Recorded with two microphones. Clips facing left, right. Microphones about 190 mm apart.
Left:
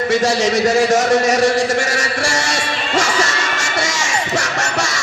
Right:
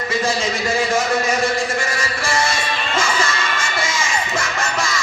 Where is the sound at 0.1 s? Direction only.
75° left (ahead or behind).